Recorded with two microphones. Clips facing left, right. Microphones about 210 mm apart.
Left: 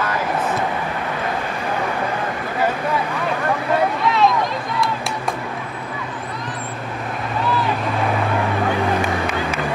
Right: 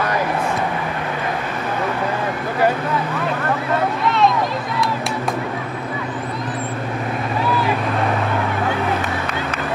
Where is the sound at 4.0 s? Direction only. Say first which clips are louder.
Even; centre (ahead or behind).